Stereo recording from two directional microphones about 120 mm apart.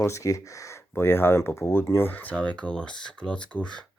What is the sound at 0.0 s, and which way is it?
Speech, 25° left (ahead or behind).